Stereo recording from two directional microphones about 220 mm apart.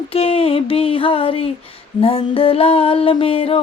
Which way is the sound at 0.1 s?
25° left (ahead or behind).